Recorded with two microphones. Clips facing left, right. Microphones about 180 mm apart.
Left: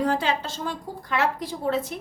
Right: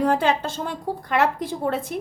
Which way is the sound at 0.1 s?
55° right (ahead or behind).